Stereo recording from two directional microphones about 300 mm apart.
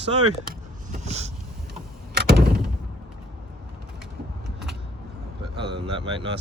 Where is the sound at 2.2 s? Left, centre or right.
Right.